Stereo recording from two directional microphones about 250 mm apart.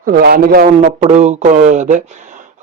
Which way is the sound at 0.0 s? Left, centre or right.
Right.